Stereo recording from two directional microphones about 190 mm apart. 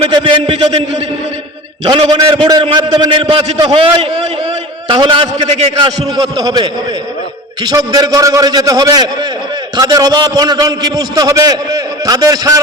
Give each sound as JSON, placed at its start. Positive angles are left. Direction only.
{"t": 0.0, "sound": "a sound", "side_deg": -25}
{"t": 1.8, "sound": "a man's voice", "side_deg": -30}
{"t": 6.0, "sound": "a man's voice", "side_deg": -20}